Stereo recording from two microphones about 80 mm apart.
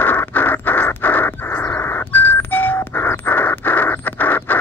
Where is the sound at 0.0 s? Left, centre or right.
Left.